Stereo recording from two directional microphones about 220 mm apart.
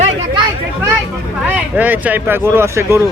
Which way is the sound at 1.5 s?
10° right (ahead or behind).